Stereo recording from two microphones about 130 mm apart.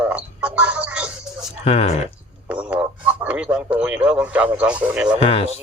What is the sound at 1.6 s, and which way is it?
Speech, 50° left (ahead or behind).